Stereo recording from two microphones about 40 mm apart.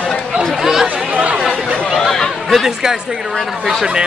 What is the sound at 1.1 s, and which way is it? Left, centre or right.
Chatter, right.